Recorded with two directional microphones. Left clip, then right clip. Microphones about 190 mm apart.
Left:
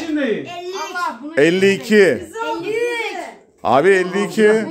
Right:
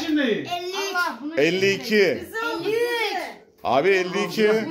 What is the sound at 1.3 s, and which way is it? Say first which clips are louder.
Speech: left 7 dB; 40° left (ahead or behind).